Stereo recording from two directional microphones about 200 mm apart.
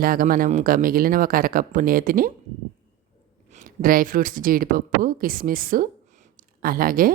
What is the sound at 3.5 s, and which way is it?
Speech, 45° right (ahead or behind).